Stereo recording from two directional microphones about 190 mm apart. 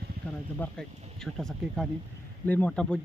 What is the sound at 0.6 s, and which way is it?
Speech, 5° left (ahead or behind).